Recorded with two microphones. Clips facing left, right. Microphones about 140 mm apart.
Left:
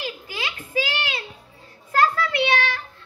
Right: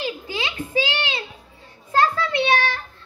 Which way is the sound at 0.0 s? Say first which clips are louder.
Right 4 dB; 25° right (ahead or behind).